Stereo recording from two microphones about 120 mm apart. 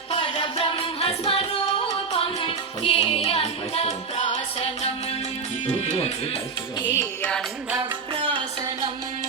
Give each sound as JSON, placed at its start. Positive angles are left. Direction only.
{"t": 0.1, "sound": "music", "side_deg": 45}
{"t": 2.1, "sound": "music", "side_deg": 45}
{"t": 5.8, "sound": "speech", "side_deg": 65}
{"t": 7.8, "sound": "music", "side_deg": -45}